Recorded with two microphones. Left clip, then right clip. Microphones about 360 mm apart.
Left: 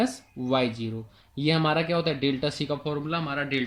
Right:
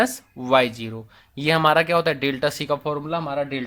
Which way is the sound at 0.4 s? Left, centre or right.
Right.